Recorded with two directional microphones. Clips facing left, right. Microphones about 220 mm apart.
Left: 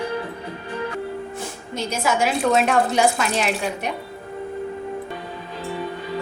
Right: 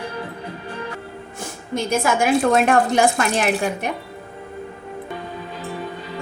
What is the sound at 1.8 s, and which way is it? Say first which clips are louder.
Speech: right 3 dB; 50° right (ahead or behind).